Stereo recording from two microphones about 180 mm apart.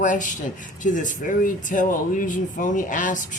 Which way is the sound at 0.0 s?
45° left (ahead or behind).